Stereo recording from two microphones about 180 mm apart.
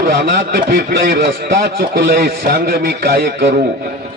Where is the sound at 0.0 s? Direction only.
65° right (ahead or behind).